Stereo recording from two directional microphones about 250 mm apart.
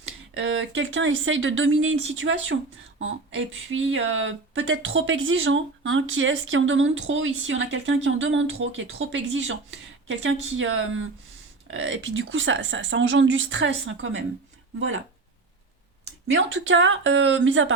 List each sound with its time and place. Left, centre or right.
0.3 s speech: right
16.2 s speech: right